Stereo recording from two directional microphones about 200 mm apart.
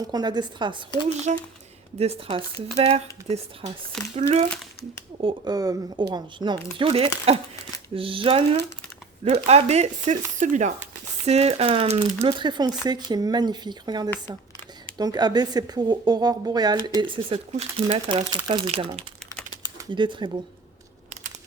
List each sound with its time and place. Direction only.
0.1 s speech: 20° right (ahead or behind)
1.3 s speech: 35° right (ahead or behind)